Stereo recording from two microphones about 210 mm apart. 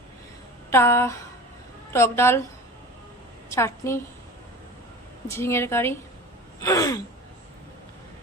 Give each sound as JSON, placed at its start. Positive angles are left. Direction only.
{"t": 0.7, "sound": "a woman's voice", "side_deg": 10}
{"t": 3.5, "sound": "a woman's voice", "side_deg": 10}
{"t": 5.3, "sound": "a woman's voice", "side_deg": 10}